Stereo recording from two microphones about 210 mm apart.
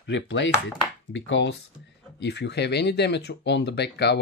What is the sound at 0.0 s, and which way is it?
Speech, 60° left (ahead or behind).